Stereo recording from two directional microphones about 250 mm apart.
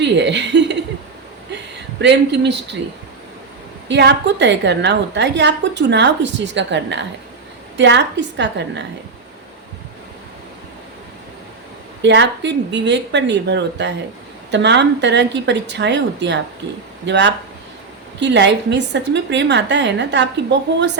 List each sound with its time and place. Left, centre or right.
0.0 s a woman's voice: right
2.0 s a woman's voice: right
3.8 s a woman's voice: right
12.0 s a woman's voice: right